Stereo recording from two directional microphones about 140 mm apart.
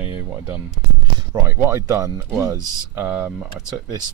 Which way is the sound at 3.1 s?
10° right (ahead or behind).